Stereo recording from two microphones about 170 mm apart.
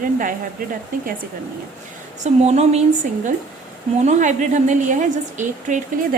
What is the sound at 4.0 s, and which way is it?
A woman's voice, 45° right (ahead or behind).